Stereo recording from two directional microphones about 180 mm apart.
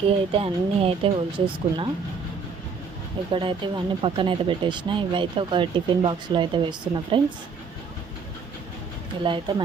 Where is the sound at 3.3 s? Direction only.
25° right (ahead or behind).